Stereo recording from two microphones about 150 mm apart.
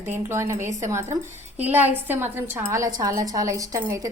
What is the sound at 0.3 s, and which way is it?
A woman's voice, 20° right (ahead or behind).